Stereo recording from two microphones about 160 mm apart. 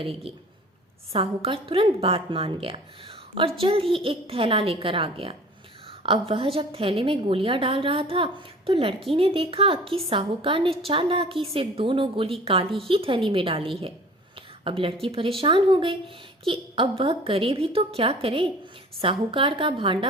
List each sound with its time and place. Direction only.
0.0 s a woman's voice: 35° right (ahead or behind)